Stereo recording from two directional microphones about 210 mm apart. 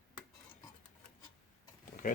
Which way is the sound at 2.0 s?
40° left (ahead or behind).